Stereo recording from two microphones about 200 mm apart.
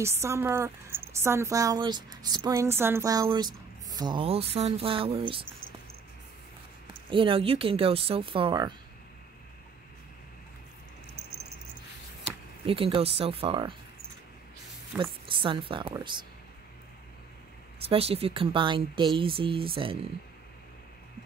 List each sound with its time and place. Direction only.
0.0 s speech: 15° right (ahead or behind)
6.9 s speech: 25° right (ahead or behind)
12.6 s speech: 25° right (ahead or behind)
15.0 s speech: 25° right (ahead or behind)
17.8 s speech: 30° right (ahead or behind)